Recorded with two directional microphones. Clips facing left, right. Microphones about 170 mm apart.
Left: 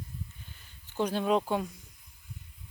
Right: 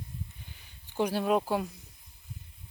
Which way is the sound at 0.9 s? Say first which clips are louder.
Even; 10° right (ahead or behind).